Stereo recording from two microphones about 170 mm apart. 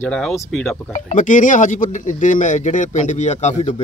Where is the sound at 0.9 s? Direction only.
45° left (ahead or behind).